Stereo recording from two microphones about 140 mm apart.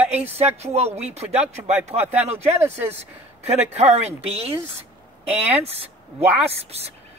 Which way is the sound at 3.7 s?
50° right (ahead or behind).